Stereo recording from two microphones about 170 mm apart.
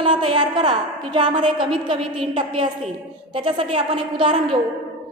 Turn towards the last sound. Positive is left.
turn(degrees=-30)  # may be behind; listen again after turning